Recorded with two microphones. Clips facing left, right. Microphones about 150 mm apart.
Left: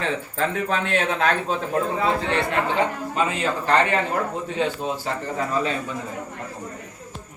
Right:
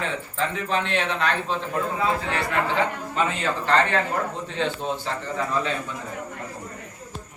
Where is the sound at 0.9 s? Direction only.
45° left (ahead or behind).